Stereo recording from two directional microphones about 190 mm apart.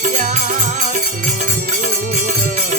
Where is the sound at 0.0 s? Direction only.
40° right (ahead or behind).